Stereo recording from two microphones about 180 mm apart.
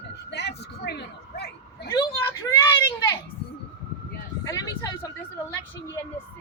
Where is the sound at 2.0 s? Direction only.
15° left (ahead or behind).